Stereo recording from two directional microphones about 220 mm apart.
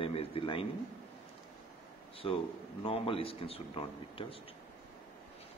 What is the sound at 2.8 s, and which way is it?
Speech, 25° left (ahead or behind).